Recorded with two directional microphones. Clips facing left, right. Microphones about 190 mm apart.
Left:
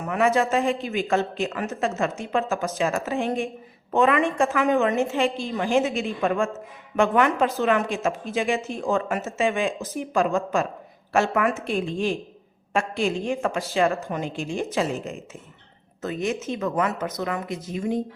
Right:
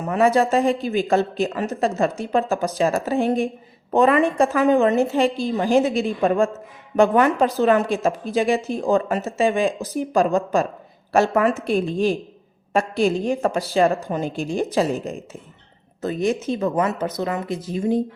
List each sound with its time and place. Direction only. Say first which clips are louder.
0.1 s speech: right 4 dB; 35° right (ahead or behind)